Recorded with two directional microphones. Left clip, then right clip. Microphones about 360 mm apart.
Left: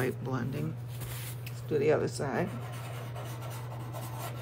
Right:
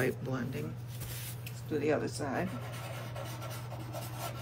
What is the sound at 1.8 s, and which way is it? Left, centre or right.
Speech, left.